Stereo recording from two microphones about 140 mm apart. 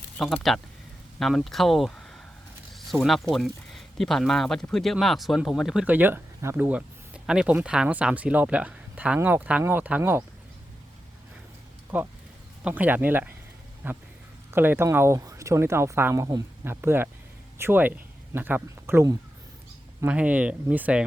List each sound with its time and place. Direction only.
0.2 s speech: centre (ahead or behind)
2.7 s zipper: centre (ahead or behind)
3.3 s speech: centre (ahead or behind); by 10.2 s 15° right (ahead or behind)
11.9 s speech: 10° right (ahead or behind)